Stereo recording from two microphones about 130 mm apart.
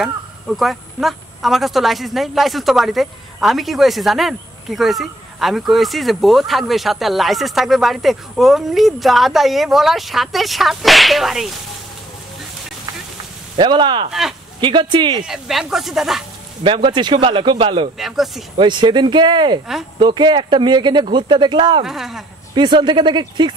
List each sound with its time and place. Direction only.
0.0 s speech: centre (ahead or behind)
13.6 s speech: 40° right (ahead or behind)
15.2 s speech: 5° right (ahead or behind)
16.6 s speech: 40° right (ahead or behind)
17.9 s speech: centre (ahead or behind)
18.6 s speech: 35° right (ahead or behind)
21.8 s speech: centre (ahead or behind)
22.5 s speech: 35° right (ahead or behind)